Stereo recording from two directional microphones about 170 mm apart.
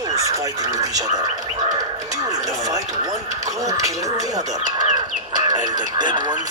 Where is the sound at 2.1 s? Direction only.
20° right (ahead or behind).